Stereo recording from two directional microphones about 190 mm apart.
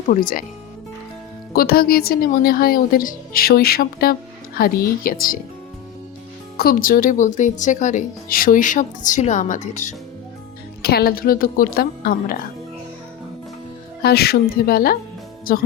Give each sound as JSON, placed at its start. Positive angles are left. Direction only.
{"t": 0.1, "sound": "speech", "side_deg": 45}
{"t": 1.5, "sound": "speech", "side_deg": 55}
{"t": 6.6, "sound": "speech", "side_deg": 50}
{"t": 10.8, "sound": "speech", "side_deg": 55}
{"t": 14.0, "sound": "speech", "side_deg": 55}